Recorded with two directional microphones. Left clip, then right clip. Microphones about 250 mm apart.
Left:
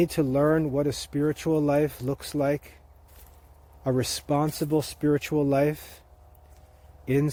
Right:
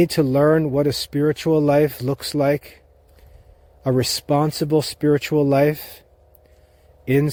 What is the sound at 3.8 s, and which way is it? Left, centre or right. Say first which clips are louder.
Speech: right 7 dB; right.